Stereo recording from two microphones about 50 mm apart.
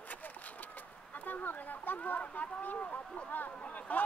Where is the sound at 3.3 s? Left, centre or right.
Left.